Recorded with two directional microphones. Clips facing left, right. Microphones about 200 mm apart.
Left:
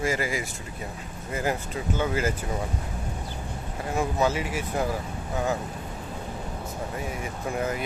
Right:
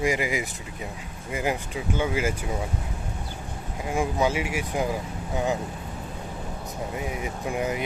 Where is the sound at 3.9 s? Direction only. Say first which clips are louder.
Right 1 dB; 10° right (ahead or behind).